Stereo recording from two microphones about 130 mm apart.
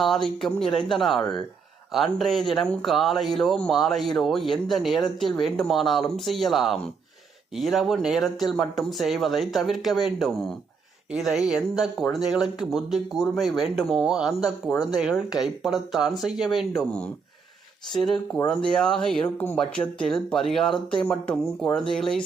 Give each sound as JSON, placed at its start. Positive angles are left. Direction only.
{"t": 0.0, "sound": "speech", "side_deg": 0}